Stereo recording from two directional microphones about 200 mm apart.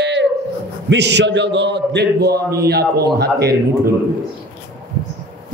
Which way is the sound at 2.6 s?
55° right (ahead or behind).